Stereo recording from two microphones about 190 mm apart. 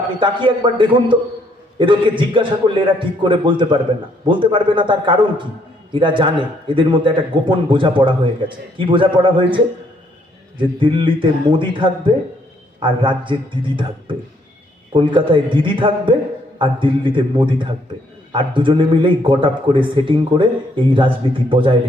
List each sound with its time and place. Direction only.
0.2 s a man's voice: 25° right (ahead or behind)
10.8 s a man's voice: 25° right (ahead or behind)